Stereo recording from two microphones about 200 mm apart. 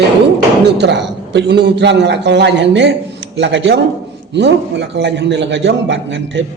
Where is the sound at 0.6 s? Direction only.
60° right (ahead or behind).